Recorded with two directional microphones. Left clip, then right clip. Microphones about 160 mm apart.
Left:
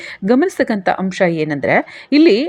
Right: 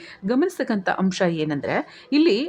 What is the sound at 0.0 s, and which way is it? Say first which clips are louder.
Speech: left 8 dB; 30° left (ahead or behind).